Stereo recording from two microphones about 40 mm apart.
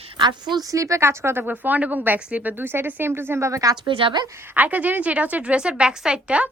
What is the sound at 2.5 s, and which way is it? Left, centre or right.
Speech, right.